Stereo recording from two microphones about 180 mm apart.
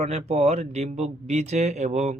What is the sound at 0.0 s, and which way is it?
Speech, 35° right (ahead or behind).